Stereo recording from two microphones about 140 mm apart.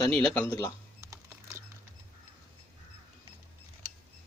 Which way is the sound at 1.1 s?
20° right (ahead or behind).